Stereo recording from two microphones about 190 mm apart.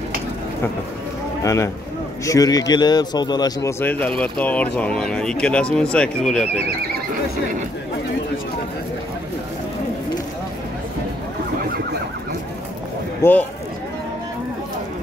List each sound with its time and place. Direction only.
1.4 s a man's voice: 15° left (ahead or behind)
3.8 s speech: 10° left (ahead or behind)
13.2 s speech: 10° left (ahead or behind)